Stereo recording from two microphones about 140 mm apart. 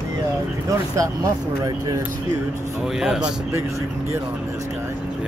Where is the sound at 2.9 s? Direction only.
5° right (ahead or behind).